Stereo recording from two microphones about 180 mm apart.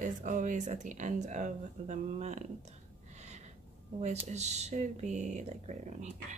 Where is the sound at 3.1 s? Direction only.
40° right (ahead or behind).